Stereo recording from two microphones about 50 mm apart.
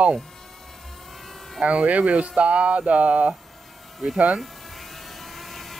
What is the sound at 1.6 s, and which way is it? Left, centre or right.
Speech, right.